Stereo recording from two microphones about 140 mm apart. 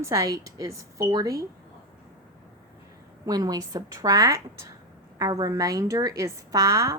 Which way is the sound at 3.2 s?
30° right (ahead or behind).